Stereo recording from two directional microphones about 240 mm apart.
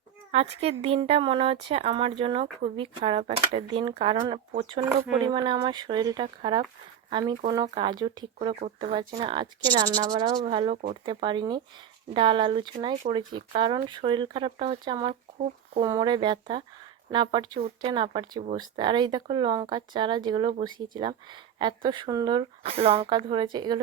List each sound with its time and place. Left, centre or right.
0.3 s speech: right